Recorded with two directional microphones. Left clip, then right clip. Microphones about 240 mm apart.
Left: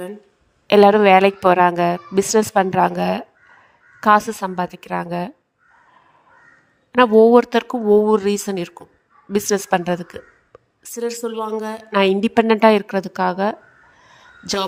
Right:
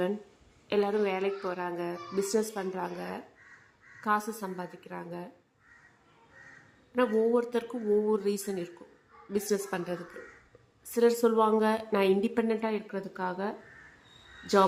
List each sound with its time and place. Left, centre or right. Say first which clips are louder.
0.7 s a woman's voice: left 18 dB; left
6.9 s a woman's voice: left 15 dB; left
10.9 s a woman's voice: even; centre
11.8 s a woman's voice: left 10 dB; left